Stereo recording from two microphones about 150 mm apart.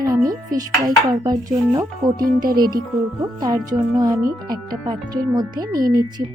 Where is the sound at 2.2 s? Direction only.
75° right (ahead or behind).